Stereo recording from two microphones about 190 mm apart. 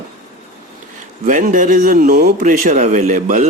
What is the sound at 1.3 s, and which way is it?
Speech, 45° right (ahead or behind).